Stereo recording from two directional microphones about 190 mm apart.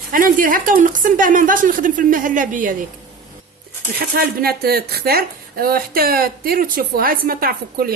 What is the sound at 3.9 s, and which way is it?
Speech, 55° right (ahead or behind).